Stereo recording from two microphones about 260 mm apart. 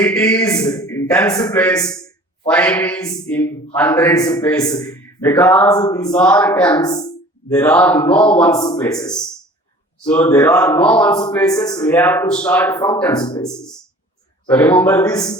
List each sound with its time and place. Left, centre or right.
0.0 s a man's voice: centre
10.1 s a man's voice: centre